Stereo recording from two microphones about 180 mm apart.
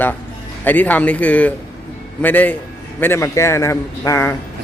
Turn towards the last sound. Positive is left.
turn(degrees=15)  # may be behind; listen again after turning